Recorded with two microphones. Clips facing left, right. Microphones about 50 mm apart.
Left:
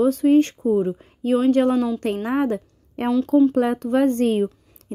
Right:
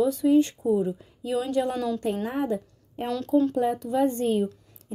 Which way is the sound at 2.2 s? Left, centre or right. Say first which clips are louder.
Left 6 dB; left.